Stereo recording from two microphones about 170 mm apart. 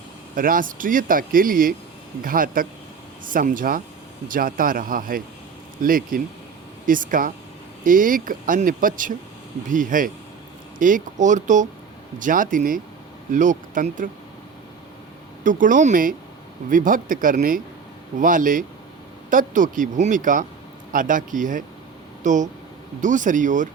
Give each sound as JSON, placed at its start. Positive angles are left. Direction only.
{"t": 0.3, "sound": "speech", "side_deg": -55}
{"t": 15.4, "sound": "speech", "side_deg": -50}